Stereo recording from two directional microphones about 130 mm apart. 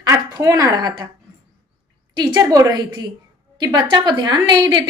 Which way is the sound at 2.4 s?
30° right (ahead or behind).